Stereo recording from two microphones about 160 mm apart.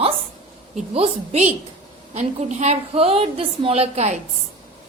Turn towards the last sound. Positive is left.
turn(degrees=-45)  # may be behind; listen again after turning